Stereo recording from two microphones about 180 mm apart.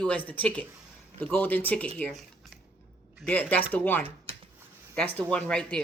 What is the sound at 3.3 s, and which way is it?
Speech, 10° left (ahead or behind).